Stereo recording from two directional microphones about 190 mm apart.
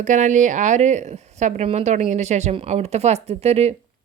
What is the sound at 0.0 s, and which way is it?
Speech, 40° right (ahead or behind).